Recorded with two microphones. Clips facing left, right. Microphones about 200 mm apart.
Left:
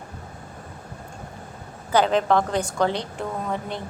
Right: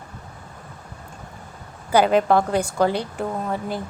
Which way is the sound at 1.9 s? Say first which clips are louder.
Right 3 dB; 10° right (ahead or behind).